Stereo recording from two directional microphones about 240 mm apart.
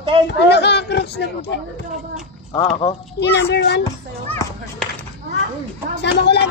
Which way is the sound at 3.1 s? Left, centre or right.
Left.